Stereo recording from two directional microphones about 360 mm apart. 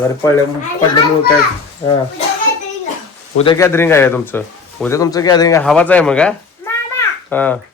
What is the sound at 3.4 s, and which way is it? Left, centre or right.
Speech, centre.